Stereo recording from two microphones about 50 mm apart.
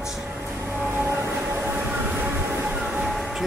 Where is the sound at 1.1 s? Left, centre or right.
Right.